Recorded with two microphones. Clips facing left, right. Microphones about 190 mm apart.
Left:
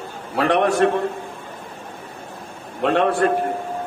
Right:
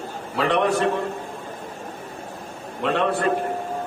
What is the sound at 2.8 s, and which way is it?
Speech, 55° left (ahead or behind).